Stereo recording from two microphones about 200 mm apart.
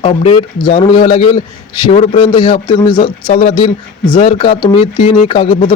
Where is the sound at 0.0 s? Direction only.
25° left (ahead or behind).